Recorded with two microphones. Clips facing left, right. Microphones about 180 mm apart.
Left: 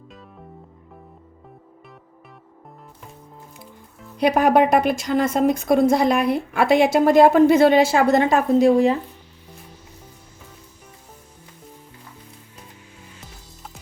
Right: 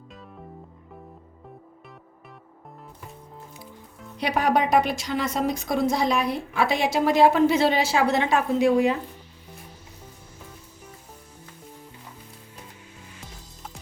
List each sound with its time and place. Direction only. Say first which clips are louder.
0.1 s music: right 2 dB; centre (ahead or behind)
4.2 s a woman's voice: left 7 dB; 50° left (ahead or behind)